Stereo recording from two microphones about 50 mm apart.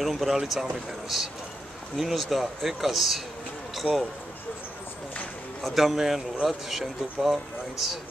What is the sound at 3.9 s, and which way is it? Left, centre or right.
Speech, right.